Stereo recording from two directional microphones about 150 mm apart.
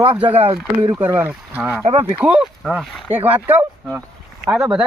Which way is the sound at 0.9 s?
15° right (ahead or behind).